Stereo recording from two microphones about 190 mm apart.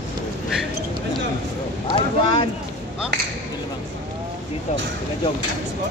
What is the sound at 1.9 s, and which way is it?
Speech, 30° left (ahead or behind).